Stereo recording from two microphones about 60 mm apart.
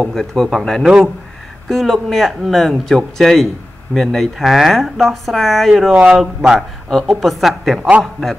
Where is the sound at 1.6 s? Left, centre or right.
Centre.